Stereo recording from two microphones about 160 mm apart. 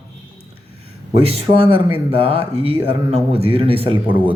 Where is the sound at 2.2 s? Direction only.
35° right (ahead or behind).